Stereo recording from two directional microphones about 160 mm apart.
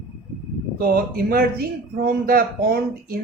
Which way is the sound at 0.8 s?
70° right (ahead or behind).